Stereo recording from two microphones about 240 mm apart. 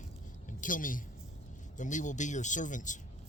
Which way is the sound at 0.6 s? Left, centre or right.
Left.